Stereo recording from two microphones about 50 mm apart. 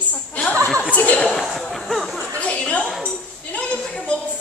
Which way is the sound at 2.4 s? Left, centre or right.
Left.